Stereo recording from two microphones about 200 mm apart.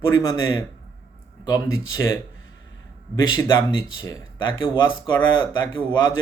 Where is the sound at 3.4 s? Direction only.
20° left (ahead or behind).